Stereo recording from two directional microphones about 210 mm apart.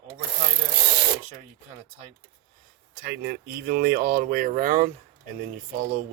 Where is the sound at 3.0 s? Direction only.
50° right (ahead or behind).